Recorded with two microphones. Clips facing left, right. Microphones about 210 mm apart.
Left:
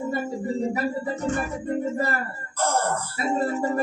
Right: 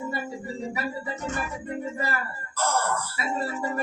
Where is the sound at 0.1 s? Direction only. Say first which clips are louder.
Left 6 dB; 50° left (ahead or behind).